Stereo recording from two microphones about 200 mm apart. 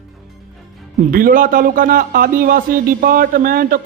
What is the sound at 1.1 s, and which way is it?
Speech, 45° right (ahead or behind).